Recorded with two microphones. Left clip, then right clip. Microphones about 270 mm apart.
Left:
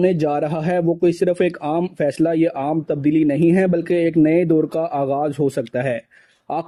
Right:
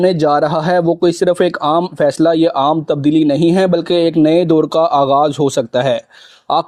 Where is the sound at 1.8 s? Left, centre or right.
Right.